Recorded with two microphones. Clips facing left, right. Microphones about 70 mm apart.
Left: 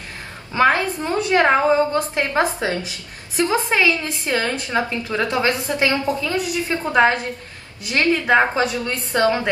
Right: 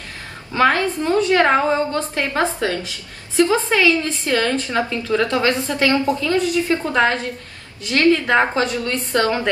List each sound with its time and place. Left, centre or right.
0.6 s a woman's voice: left